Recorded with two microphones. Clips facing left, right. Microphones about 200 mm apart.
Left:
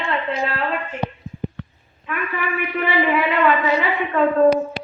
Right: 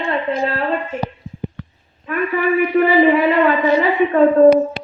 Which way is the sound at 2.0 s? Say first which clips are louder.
Right 8 dB; 40° right (ahead or behind).